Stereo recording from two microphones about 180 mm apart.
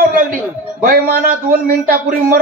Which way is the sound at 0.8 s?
55° right (ahead or behind).